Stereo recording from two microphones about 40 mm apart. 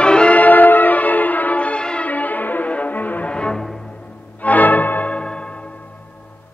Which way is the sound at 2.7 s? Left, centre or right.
Left.